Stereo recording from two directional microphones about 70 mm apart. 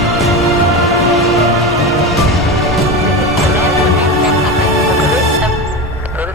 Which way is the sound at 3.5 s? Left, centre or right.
Right.